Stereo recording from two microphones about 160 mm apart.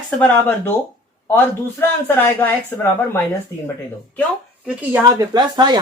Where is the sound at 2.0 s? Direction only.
10° left (ahead or behind).